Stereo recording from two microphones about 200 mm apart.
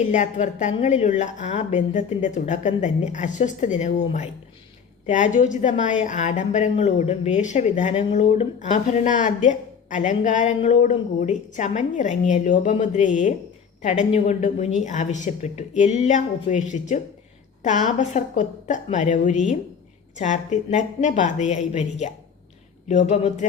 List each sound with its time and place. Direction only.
0.0 s a woman's voice: 35° left (ahead or behind)